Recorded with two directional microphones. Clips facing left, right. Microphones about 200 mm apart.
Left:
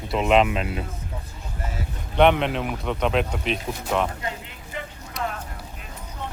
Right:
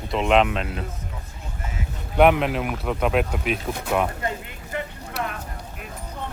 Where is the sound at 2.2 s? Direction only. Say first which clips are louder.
Right 1 dB; 5° right (ahead or behind).